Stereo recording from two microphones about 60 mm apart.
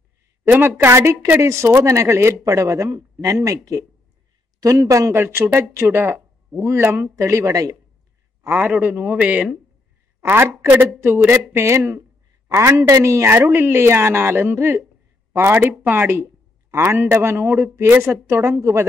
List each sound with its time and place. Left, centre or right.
0.5 s a woman's voice: right
2.4 s a man's voice: right
5.1 s a man's voice: right
7.2 s speech: right
8.5 s a man's voice: right
10.2 s a woman's voice: right